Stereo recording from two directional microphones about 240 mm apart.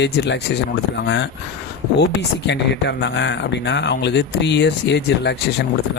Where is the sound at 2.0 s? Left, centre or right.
Left.